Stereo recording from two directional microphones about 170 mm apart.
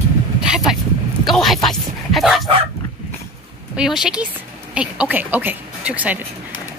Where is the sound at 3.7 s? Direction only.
5° right (ahead or behind).